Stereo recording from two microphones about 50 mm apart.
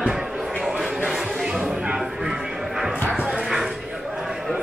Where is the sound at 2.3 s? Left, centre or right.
Centre.